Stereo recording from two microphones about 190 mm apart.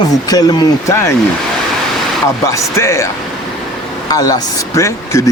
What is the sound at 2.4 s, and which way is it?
Speech, 15° left (ahead or behind).